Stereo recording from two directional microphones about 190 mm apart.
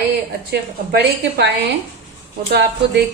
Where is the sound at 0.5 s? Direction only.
55° right (ahead or behind).